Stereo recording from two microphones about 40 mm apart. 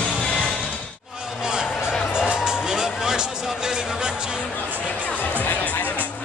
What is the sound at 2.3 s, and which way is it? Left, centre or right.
Music, centre.